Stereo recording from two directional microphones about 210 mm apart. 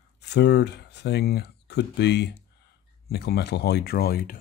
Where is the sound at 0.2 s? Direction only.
55° left (ahead or behind).